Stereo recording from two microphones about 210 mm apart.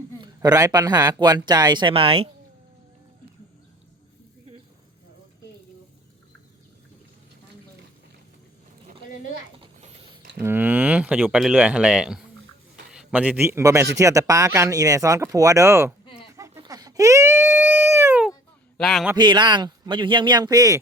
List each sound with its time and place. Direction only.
0.2 s speech: 20° right (ahead or behind)
9.6 s a sound: 25° right (ahead or behind)
10.4 s a man's voice: 10° right (ahead or behind)
16.3 s baby cry: 15° right (ahead or behind)
18.8 s a man's voice: centre (ahead or behind)
19.1 s speech: 20° right (ahead or behind)